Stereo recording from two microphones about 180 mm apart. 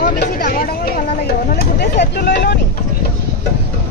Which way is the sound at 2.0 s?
60° left (ahead or behind).